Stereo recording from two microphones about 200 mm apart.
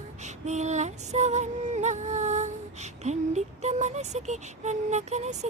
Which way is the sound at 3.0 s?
35° right (ahead or behind).